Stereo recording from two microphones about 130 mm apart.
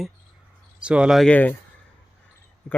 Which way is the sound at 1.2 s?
10° left (ahead or behind).